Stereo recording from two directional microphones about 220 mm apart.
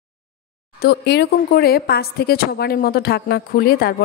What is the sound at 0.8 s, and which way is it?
Speech, 50° left (ahead or behind).